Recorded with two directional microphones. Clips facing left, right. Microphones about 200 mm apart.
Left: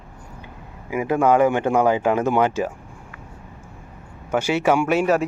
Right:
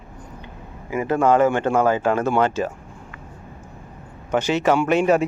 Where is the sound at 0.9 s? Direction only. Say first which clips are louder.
Even; 10° left (ahead or behind).